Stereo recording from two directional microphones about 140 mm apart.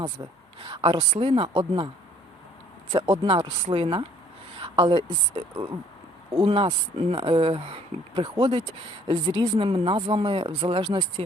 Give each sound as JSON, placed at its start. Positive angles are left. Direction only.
{"t": 0.2, "sound": "speech", "side_deg": -30}
{"t": 2.9, "sound": "a woman's voice", "side_deg": -40}
{"t": 6.3, "sound": "speech", "side_deg": -40}